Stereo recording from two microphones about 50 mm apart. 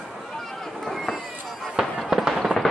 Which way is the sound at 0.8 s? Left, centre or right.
Centre.